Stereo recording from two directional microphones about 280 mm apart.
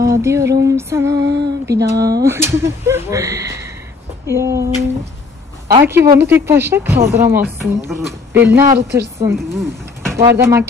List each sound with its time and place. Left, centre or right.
0.0 s a sound: centre
0.7 s a woman's voice: centre
1.2 s speech: right
1.7 s a woman's voice: centre
5.9 s speech: right
6.2 s a woman's voice: centre
10.1 s a woman's voice: centre